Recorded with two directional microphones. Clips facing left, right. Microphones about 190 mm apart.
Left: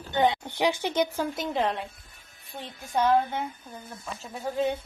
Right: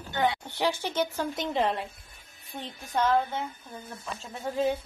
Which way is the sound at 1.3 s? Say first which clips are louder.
Even; centre (ahead or behind).